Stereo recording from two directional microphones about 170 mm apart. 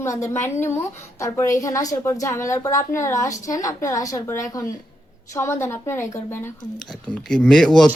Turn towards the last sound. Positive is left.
turn(degrees=5)  # may be behind; listen again after turning